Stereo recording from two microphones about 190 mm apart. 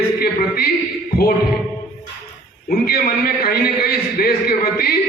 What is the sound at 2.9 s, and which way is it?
A man's voice, 50° left (ahead or behind).